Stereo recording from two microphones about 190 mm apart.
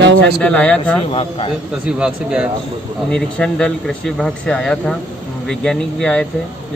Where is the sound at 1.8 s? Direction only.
5° right (ahead or behind).